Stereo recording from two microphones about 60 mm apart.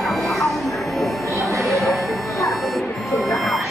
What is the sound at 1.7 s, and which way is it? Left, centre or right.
Music, centre.